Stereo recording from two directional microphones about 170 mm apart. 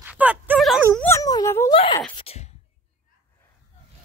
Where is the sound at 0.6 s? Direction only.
Centre (ahead or behind).